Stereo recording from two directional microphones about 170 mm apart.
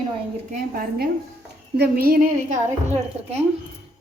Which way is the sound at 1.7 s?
70° right (ahead or behind).